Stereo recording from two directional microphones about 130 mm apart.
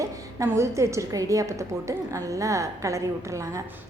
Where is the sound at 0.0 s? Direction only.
20° right (ahead or behind).